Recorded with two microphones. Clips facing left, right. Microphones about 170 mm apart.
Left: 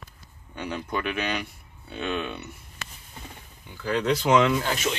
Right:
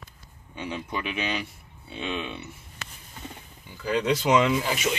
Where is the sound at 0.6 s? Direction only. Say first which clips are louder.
Left 2 dB; 5° right (ahead or behind).